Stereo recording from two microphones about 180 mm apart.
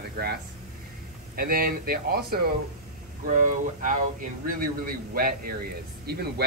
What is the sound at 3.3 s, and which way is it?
A man's voice, 45° right (ahead or behind).